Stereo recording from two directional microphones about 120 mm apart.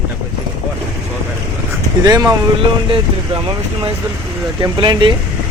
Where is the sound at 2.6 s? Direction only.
45° right (ahead or behind).